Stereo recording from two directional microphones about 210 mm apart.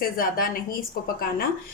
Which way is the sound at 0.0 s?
45° left (ahead or behind).